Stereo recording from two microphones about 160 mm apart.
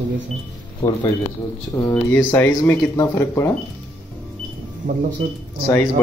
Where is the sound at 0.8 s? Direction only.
20° left (ahead or behind).